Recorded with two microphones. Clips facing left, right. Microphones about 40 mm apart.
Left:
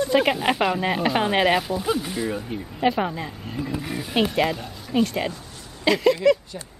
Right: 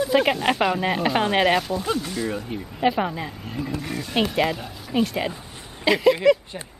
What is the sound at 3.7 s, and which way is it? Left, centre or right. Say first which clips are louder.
Speech: left 1 dB; centre.